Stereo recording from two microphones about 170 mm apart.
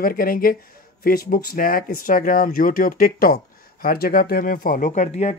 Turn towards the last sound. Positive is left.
turn(degrees=40)  # may be behind; listen again after turning